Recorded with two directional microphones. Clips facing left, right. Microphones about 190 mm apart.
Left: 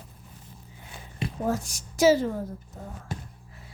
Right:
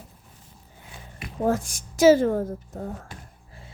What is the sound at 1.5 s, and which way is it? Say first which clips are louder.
A woman's voice: right 6 dB; 50° right (ahead or behind).